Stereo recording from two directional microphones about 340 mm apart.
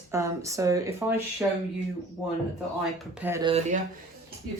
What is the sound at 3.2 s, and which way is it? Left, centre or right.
Speech, centre.